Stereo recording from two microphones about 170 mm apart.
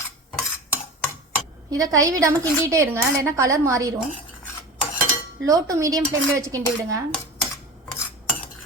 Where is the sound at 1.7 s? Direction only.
20° right (ahead or behind).